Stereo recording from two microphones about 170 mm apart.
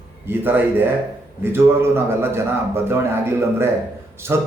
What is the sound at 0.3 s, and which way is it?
A man's voice, 10° right (ahead or behind).